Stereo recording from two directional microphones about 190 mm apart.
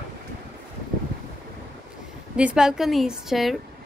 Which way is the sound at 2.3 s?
5° right (ahead or behind).